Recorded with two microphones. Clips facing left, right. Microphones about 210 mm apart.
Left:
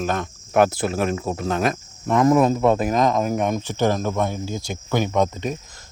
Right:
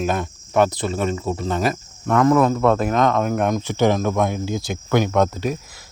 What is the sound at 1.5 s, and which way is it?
Speech, centre (ahead or behind).